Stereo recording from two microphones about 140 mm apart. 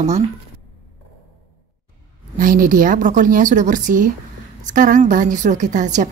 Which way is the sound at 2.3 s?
75° right (ahead or behind).